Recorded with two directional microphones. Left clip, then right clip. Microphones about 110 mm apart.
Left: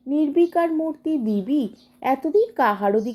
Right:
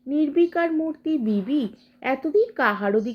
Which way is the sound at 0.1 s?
30° left (ahead or behind).